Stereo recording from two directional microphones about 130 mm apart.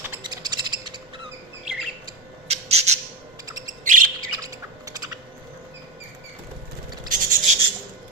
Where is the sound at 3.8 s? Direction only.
85° right.